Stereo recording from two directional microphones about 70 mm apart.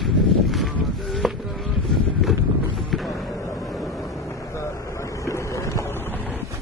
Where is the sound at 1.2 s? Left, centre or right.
Centre.